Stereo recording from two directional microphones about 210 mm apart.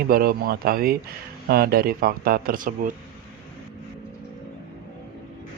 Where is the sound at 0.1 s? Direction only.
45° right (ahead or behind).